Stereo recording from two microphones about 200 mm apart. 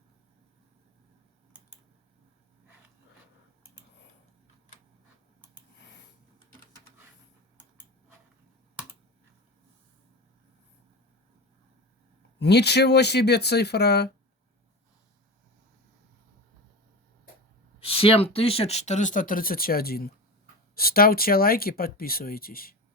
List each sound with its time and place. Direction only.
12.4 s speech: 55° left (ahead or behind)
17.7 s speech: 30° left (ahead or behind); by 22.7 s 50° left (ahead or behind)